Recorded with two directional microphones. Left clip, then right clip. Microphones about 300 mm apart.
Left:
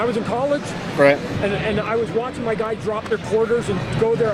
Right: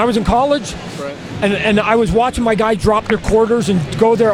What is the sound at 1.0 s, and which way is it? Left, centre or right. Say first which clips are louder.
Speech: left 13 dB; left.